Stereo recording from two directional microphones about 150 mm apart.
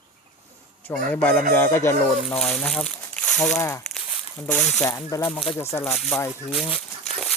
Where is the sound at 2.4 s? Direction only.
5° left (ahead or behind).